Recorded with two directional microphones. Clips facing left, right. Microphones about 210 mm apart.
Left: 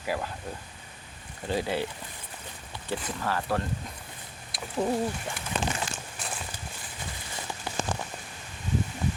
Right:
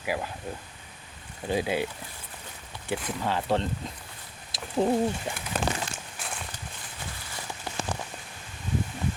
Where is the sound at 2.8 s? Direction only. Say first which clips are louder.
Right 2 dB; 15° right (ahead or behind).